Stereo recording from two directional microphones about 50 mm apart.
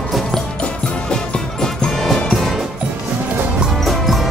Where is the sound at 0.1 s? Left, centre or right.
Centre.